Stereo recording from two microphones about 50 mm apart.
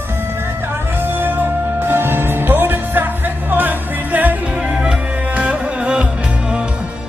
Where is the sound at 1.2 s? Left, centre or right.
Right.